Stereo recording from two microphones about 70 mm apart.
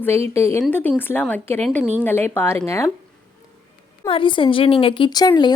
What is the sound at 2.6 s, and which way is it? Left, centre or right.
Speech, left.